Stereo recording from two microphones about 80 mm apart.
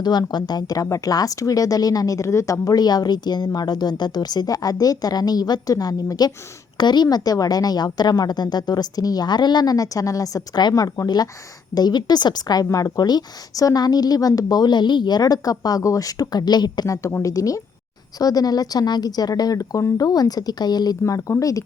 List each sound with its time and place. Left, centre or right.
0.0 s a woman's voice: left
6.7 s a woman's voice: left
21.0 s a woman's voice: left